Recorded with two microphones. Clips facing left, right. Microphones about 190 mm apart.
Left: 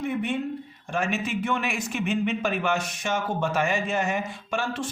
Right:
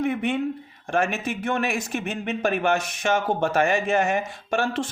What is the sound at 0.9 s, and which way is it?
Speech, 55° right (ahead or behind).